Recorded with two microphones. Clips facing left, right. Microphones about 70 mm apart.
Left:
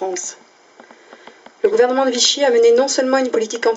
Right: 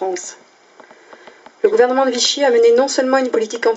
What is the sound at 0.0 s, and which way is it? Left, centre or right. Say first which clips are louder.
Speech: right 2 dB; centre.